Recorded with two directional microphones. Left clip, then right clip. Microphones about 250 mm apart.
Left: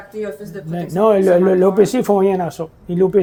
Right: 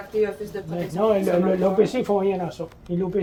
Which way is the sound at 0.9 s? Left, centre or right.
Left.